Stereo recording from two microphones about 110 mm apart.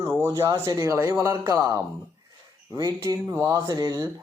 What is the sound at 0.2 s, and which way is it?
Speech, 25° right (ahead or behind).